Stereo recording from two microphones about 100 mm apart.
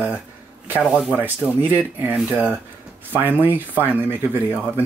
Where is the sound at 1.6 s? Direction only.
20° right (ahead or behind).